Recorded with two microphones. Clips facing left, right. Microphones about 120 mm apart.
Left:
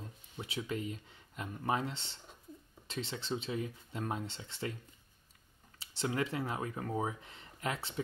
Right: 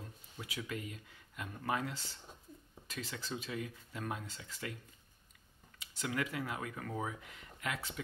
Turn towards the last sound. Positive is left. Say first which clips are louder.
# left 3 dB
turn(degrees=30)  # may be behind; listen again after turning